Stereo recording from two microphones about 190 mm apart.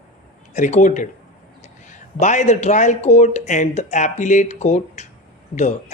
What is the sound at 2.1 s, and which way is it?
A man's voice, 40° left (ahead or behind).